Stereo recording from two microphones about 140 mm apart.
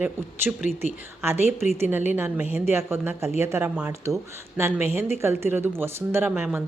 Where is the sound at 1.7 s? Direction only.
15° right (ahead or behind).